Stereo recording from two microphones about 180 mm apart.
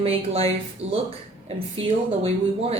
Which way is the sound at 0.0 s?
35° right (ahead or behind).